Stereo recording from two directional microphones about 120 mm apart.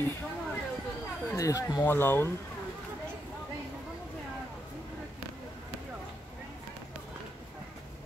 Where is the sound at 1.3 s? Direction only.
25° left (ahead or behind).